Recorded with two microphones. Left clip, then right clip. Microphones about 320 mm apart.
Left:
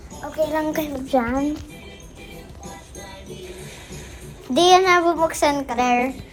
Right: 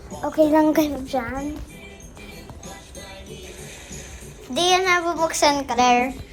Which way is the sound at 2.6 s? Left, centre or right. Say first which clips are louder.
Left 2 dB; centre.